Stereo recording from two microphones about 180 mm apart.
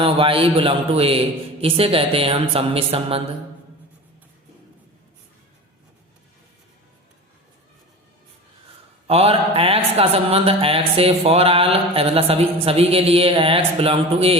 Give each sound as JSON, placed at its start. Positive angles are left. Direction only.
{"t": 0.0, "sound": "speech", "side_deg": -30}
{"t": 9.0, "sound": "speech", "side_deg": -35}